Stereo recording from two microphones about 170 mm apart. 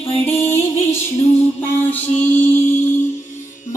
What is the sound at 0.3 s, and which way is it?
Music, 15° left (ahead or behind).